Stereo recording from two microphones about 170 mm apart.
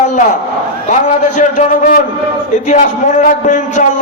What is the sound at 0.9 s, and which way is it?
A man's voice, 45° left (ahead or behind).